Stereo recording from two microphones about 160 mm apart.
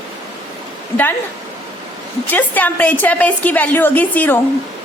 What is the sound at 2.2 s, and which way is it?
A woman's voice, 10° left (ahead or behind).